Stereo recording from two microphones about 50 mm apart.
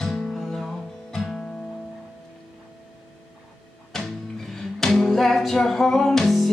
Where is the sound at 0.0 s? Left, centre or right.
Centre.